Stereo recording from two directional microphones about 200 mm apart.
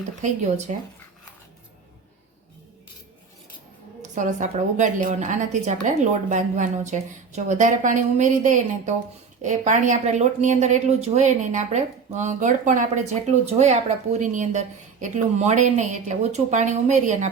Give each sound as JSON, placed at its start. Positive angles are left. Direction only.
{"t": 0.7, "sound": "a woman's voice", "side_deg": -35}
{"t": 4.1, "sound": "a woman's voice", "side_deg": -35}